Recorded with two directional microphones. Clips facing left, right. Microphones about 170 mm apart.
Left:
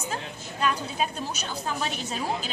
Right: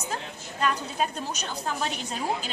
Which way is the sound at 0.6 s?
10° left (ahead or behind).